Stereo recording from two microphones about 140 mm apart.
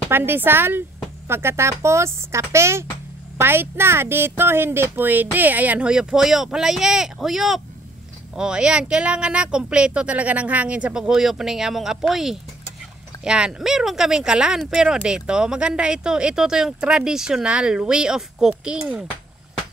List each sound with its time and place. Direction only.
0.1 s speech: 15° right (ahead or behind)